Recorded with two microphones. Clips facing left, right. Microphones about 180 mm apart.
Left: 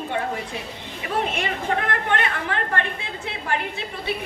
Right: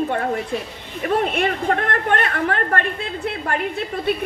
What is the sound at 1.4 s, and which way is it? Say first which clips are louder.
Speech: right 5 dB; 50° right (ahead or behind).